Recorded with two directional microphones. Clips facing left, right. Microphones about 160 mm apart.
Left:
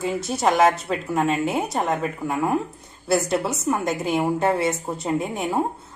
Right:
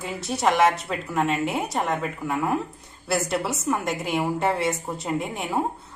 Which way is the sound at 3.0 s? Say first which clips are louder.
Left 4 dB; centre (ahead or behind).